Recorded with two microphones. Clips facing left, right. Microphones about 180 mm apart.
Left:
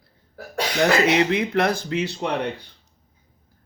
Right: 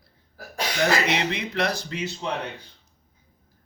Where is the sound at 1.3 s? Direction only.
55° left (ahead or behind).